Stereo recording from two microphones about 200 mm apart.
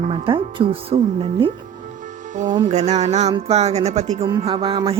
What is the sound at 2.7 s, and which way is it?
Speech, 35° right (ahead or behind).